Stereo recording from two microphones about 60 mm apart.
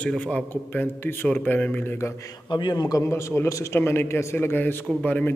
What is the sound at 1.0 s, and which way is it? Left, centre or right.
Speech, left.